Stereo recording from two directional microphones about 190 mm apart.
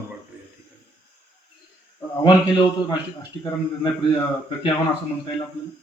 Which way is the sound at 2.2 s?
25° left (ahead or behind).